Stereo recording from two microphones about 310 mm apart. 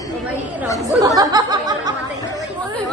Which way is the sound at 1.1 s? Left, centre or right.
Centre.